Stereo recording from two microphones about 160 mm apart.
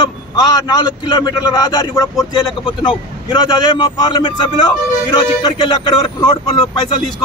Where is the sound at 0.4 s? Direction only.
25° left (ahead or behind).